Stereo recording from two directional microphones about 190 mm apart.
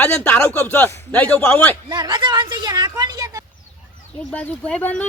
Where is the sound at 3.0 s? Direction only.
20° right (ahead or behind).